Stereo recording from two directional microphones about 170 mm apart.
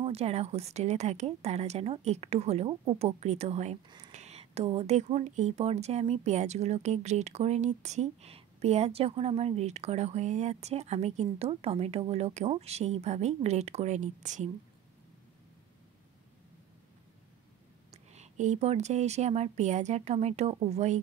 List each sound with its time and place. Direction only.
0.0 s speech: 35° right (ahead or behind)
17.9 s speech: 40° right (ahead or behind)